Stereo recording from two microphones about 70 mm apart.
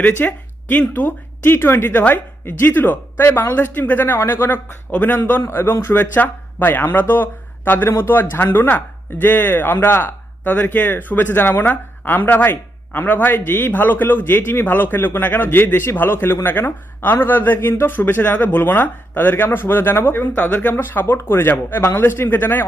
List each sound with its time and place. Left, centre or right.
0.0 s a man's voice: left